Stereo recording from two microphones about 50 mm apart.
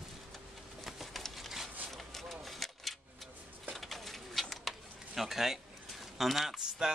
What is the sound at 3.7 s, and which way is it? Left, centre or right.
Bird, centre.